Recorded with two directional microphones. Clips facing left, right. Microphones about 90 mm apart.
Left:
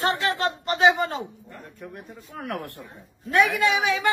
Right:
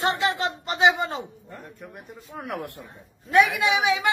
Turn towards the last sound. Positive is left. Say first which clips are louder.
# even
turn(degrees=-15)  # may be behind; listen again after turning